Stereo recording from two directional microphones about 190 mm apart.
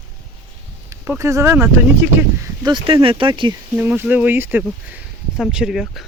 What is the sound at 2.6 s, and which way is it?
Speech, 25° right (ahead or behind).